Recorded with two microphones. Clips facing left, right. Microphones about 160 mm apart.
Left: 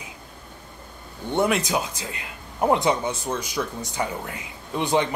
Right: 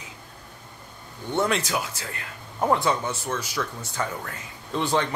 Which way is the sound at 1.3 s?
15° left (ahead or behind).